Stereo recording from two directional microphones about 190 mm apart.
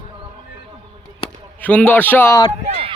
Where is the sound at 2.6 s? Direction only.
35° right (ahead or behind).